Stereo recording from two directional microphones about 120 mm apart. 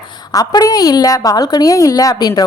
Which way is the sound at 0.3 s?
30° left (ahead or behind).